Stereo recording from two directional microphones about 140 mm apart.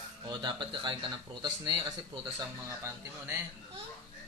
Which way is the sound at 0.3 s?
30° right (ahead or behind).